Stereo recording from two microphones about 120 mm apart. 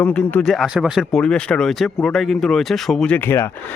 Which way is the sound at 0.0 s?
10° left (ahead or behind).